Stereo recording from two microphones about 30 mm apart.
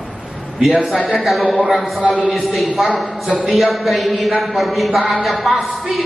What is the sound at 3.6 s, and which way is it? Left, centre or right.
A man's voice, centre.